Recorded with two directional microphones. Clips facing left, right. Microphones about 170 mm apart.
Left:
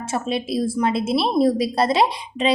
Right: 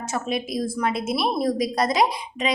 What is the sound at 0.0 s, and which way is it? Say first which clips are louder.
A woman's voice: left 2 dB; 30° left (ahead or behind).